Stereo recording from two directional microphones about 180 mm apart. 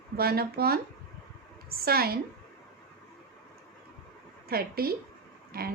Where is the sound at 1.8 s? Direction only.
55° right (ahead or behind).